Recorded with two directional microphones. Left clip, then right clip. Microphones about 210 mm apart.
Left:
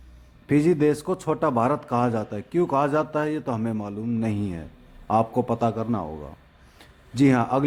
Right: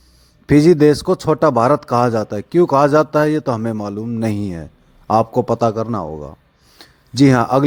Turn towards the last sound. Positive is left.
turn(degrees=-30)  # may be behind; listen again after turning